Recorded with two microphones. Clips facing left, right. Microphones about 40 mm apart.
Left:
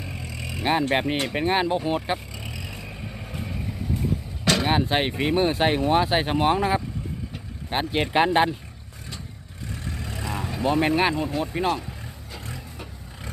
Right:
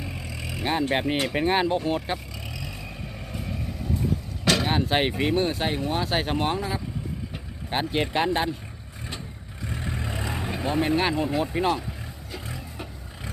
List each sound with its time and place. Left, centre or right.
0.0 s vehicle: centre
0.6 s speech: centre
0.9 s vehicle: centre
4.7 s speech: centre
5.3 s speech: centre
6.6 s speech: left
7.7 s speech: centre
8.1 s speech: left
9.6 s vehicle: right
10.8 s speech: centre
11.1 s speech: centre
12.3 s vehicle: centre